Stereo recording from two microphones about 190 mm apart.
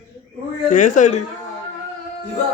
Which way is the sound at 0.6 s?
40° left (ahead or behind).